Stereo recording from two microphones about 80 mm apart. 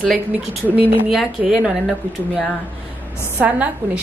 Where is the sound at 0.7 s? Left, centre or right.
Right.